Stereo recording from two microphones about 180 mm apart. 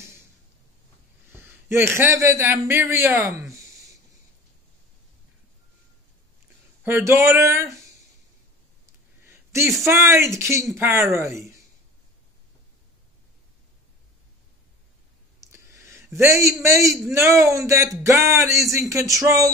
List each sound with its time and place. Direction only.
1.3 s a man's voice: 10° right (ahead or behind)
6.8 s speech: 10° right (ahead or behind)
9.2 s a sound: 15° right (ahead or behind)
9.8 s speech: 15° right (ahead or behind)
15.4 s a sound: 15° right (ahead or behind)
17.1 s speech: 15° right (ahead or behind)